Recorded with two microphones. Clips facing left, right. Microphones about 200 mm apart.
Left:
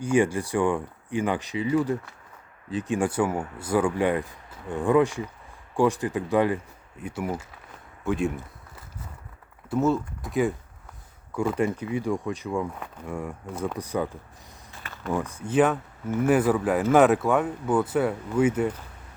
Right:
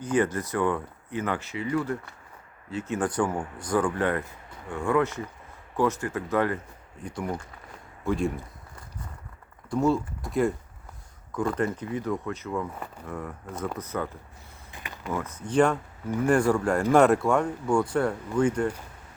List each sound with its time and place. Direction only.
0.0 s speech: 10° left (ahead or behind)
9.6 s speech: 5° left (ahead or behind)
14.7 s a sound: 15° right (ahead or behind)
15.1 s speech: 15° left (ahead or behind)